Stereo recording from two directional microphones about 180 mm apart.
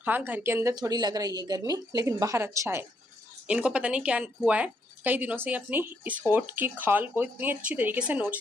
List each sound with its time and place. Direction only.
0.0 s a woman's voice: 10° right (ahead or behind)